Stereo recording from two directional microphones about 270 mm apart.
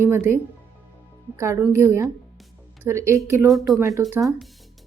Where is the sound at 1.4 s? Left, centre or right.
Centre.